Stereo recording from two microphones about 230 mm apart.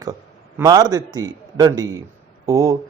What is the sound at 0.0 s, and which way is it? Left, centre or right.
A man's voice, centre.